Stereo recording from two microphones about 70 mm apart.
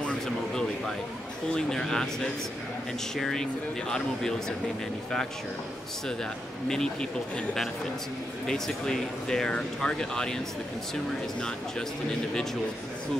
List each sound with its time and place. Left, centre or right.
0.0 s a sound: centre
1.5 s speech: centre
6.7 s speech: centre